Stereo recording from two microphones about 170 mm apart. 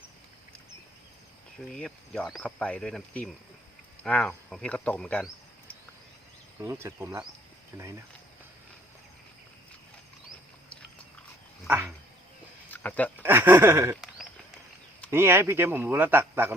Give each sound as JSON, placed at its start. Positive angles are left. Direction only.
{"t": 1.7, "sound": "speech", "side_deg": 5}
{"t": 6.6, "sound": "speech", "side_deg": -15}
{"t": 11.7, "sound": "speech", "side_deg": -10}
{"t": 12.7, "sound": "a sound", "side_deg": 10}
{"t": 13.2, "sound": "speech", "side_deg": -10}
{"t": 15.1, "sound": "speech", "side_deg": -15}